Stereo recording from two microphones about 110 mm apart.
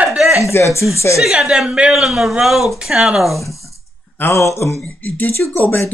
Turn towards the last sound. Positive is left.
turn(degrees=25)  # may be behind; listen again after turning